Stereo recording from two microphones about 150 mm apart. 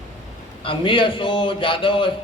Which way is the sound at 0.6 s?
35° left (ahead or behind).